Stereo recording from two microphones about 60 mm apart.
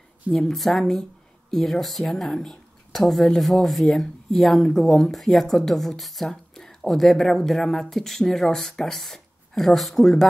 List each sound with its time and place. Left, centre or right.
0.3 s speech: centre